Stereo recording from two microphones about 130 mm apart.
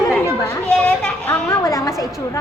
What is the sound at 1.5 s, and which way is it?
Speech, 25° left (ahead or behind).